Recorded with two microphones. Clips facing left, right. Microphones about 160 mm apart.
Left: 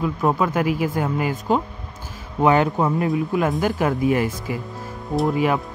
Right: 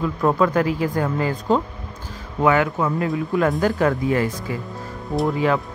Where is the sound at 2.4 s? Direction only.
30° left (ahead or behind).